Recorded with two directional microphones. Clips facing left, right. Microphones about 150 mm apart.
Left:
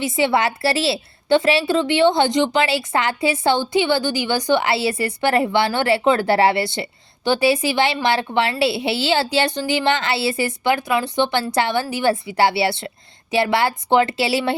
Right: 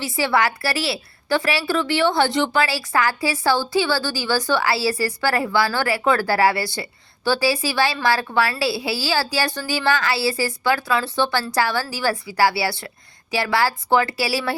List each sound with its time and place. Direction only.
0.0 s a woman's voice: 20° left (ahead or behind)